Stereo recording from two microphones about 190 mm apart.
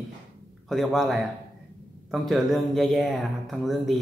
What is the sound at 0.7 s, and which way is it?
Speech, centre (ahead or behind).